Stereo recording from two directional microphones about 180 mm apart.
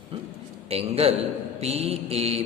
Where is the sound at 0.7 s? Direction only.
35° right (ahead or behind).